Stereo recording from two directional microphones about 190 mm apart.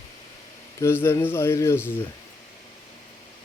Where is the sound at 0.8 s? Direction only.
15° left (ahead or behind).